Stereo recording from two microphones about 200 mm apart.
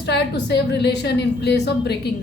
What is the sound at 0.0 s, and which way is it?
A woman's voice, 55° left (ahead or behind).